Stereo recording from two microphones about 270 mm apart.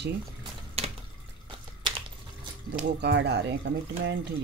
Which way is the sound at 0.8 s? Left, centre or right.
Right.